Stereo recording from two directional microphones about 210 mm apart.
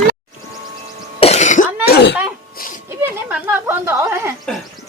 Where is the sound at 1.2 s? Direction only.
30° left (ahead or behind).